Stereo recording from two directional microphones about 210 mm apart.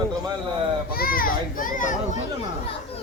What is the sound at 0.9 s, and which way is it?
A child's voice, 45° left (ahead or behind).